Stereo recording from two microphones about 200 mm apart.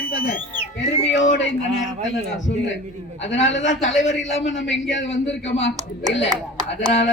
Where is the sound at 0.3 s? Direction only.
40° left (ahead or behind).